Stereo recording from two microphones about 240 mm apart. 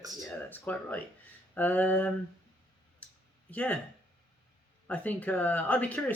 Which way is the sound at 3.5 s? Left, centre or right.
Centre.